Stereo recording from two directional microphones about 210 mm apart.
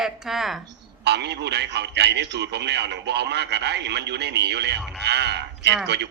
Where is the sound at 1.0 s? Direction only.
55° right (ahead or behind).